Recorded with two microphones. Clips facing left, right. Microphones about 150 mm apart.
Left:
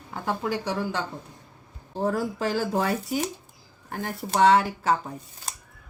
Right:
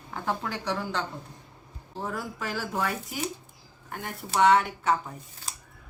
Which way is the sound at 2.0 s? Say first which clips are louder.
Left 8 dB; 35° left (ahead or behind).